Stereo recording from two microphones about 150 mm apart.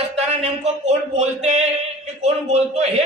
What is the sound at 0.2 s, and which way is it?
A man's voice, 50° right (ahead or behind).